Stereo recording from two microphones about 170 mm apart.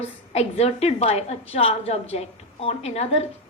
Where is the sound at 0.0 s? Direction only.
40° left (ahead or behind).